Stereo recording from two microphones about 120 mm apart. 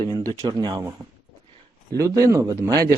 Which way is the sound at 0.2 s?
30° right (ahead or behind).